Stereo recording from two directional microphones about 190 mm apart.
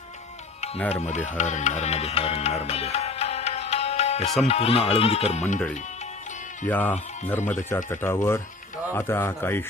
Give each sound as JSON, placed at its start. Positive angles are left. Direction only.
{"t": 0.9, "sound": "speech", "side_deg": 35}
{"t": 6.7, "sound": "a man's voice", "side_deg": 10}